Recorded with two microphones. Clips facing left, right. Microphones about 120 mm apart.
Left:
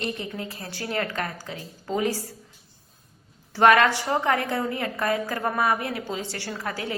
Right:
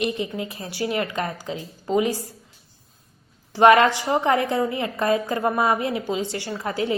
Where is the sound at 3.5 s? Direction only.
20° right (ahead or behind).